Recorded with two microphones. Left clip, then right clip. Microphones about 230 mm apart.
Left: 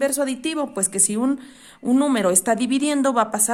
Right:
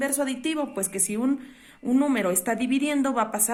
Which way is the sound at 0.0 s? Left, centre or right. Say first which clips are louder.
Left 5 dB; left.